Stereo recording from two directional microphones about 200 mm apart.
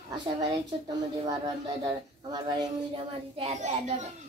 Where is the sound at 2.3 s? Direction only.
25° right (ahead or behind).